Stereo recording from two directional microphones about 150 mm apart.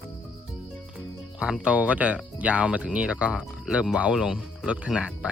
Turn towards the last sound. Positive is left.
turn(degrees=-5)  # may be behind; listen again after turning